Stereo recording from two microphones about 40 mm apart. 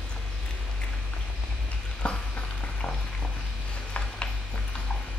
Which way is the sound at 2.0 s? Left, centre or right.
Left.